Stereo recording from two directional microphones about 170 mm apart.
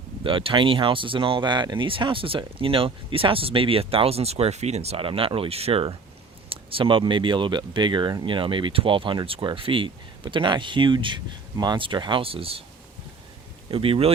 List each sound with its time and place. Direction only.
0.2 s speech: 30° right (ahead or behind)
13.7 s speech: 35° right (ahead or behind)